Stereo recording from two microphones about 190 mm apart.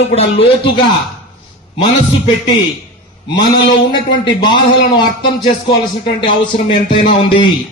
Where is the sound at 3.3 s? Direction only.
25° left (ahead or behind).